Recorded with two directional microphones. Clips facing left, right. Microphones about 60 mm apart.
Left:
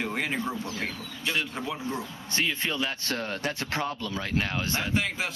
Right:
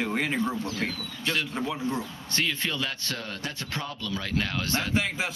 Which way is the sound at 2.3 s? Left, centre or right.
Left.